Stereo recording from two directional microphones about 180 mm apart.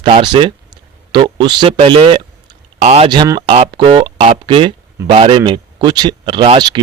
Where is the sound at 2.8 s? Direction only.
35° right (ahead or behind).